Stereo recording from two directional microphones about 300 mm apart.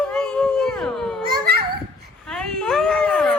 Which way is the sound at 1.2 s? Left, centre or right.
Right.